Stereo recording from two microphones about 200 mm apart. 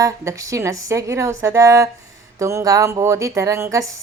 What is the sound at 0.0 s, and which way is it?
Speech, 15° right (ahead or behind).